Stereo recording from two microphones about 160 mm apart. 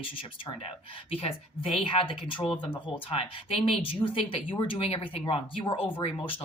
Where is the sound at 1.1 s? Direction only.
35° left (ahead or behind).